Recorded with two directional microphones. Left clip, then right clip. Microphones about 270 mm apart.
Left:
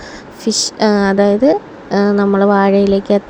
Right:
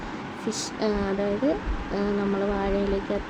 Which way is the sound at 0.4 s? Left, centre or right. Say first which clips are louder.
Left 14 dB; left.